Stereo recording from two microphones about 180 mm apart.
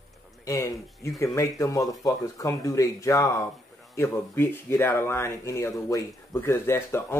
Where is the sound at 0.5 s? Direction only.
15° left (ahead or behind).